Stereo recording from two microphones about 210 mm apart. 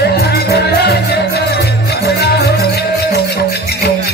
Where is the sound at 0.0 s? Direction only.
50° left (ahead or behind).